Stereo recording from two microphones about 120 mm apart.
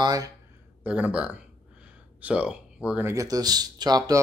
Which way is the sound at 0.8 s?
10° right (ahead or behind).